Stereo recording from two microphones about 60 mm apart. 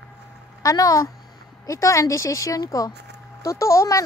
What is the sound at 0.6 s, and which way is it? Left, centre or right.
Speech, left.